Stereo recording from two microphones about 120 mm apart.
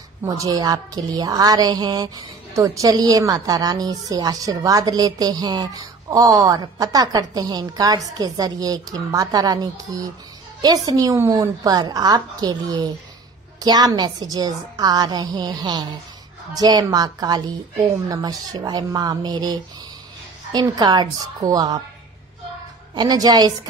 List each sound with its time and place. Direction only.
0.2 s speech: 30° right (ahead or behind)
22.9 s speech: 35° right (ahead or behind)